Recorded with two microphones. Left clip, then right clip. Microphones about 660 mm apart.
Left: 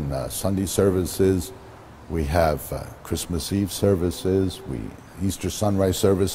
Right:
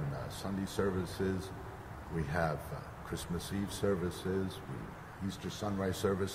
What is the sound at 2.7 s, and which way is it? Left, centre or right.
Speech, left.